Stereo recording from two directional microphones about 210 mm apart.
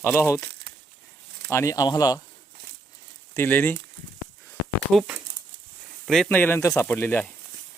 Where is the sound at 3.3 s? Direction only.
10° left (ahead or behind).